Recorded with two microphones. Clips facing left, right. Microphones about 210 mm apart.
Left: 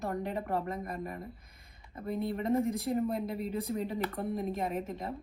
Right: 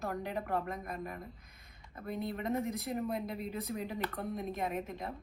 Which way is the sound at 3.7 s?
Centre (ahead or behind).